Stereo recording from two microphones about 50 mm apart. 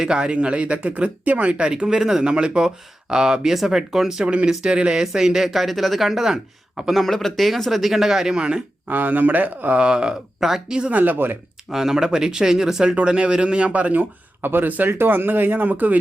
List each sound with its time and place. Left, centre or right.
0.0 s speech: centre
2.2 s speech: centre
4.2 s speech: right
6.9 s speech: centre
8.4 s speech: centre
8.9 s speech: right
9.7 s speech: centre
10.9 s speech: right
11.7 s speech: centre; by 16.0 s right